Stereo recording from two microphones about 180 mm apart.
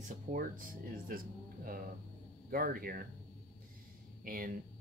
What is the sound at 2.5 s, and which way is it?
Speech, 50° right (ahead or behind).